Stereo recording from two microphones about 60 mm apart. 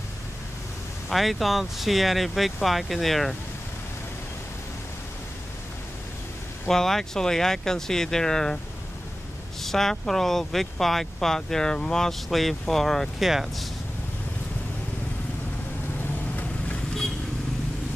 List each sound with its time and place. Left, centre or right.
1.1 s speech: centre
6.7 s speech: centre
9.6 s speech: centre
16.0 s vehicle: left